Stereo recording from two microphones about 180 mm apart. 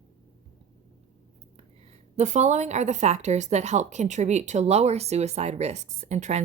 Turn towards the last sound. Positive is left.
turn(degrees=-40)  # may be behind; listen again after turning